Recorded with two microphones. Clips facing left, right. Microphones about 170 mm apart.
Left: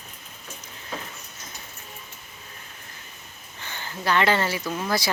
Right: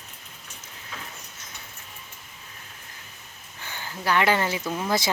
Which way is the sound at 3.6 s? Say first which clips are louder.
Left 1 dB; 10° right (ahead or behind).